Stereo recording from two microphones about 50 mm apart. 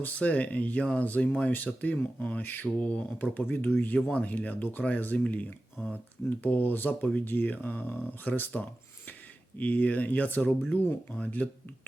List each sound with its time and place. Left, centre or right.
0.0 s speech: left
1.5 s speech: left
2.8 s speech: left
3.5 s speech: left
11.1 s speech: left